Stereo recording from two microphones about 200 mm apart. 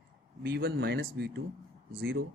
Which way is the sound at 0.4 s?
50° right (ahead or behind).